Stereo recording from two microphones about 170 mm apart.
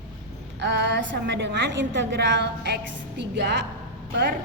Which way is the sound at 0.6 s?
90° right.